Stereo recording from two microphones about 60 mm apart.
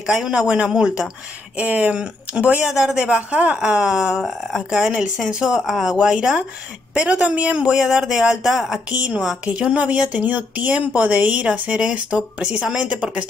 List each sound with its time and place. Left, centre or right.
0.0 s a man's voice: centre
0.3 s speech: centre
4.2 s speech: centre
8.9 s speech: right